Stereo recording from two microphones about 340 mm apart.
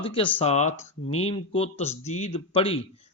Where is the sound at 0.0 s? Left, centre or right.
Centre.